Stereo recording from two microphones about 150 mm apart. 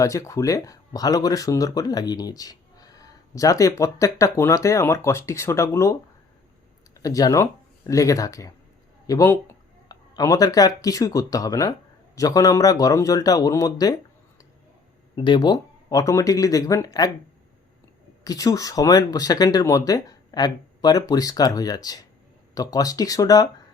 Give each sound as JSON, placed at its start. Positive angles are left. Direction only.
{"t": 0.0, "sound": "speech", "side_deg": 20}
{"t": 15.1, "sound": "speech", "side_deg": 30}
{"t": 18.2, "sound": "speech", "side_deg": 25}